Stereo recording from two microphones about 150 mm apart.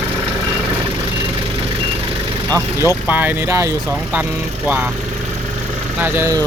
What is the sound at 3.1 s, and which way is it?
Speech, 15° right (ahead or behind).